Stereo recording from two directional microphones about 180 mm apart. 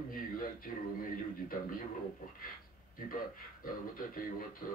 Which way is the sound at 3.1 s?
50° left (ahead or behind).